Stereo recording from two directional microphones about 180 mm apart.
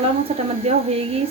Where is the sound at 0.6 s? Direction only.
35° right (ahead or behind).